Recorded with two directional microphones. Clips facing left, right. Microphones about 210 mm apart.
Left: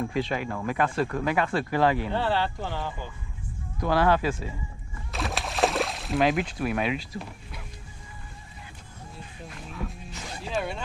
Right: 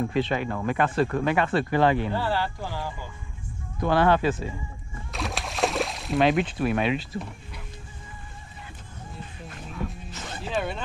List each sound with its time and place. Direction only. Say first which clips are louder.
0.1 s speech: right 3 dB; centre (ahead or behind)
2.1 s speech: left 1 dB; 25° left (ahead or behind)
3.8 s speech: right 2 dB; 5° left (ahead or behind)
5.1 s a sound: left 1 dB; centre (ahead or behind)
9.1 s music: right 1 dB; centre (ahead or behind)